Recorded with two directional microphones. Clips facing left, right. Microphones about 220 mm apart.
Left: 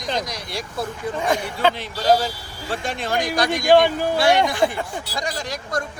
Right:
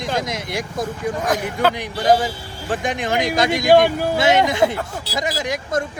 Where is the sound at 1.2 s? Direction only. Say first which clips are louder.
Even; 5° right (ahead or behind).